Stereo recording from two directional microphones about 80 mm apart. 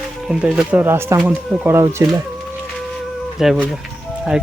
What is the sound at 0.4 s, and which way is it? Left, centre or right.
Speech, centre.